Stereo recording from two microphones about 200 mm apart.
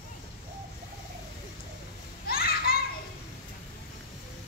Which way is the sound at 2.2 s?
50° left (ahead or behind).